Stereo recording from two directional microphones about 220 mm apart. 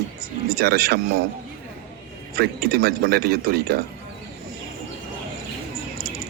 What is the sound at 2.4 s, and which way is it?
A man's voice, 45° right (ahead or behind).